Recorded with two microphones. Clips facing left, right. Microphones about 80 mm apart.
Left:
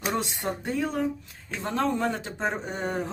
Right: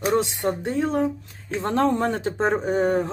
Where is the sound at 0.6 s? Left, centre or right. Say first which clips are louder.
Right 5 dB; right.